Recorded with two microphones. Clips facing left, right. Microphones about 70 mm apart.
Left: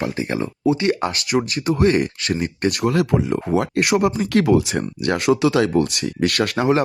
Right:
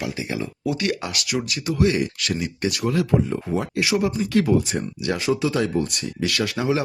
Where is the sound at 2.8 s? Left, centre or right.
Left.